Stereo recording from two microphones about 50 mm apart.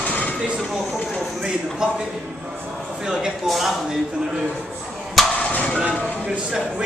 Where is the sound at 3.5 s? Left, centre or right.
Centre.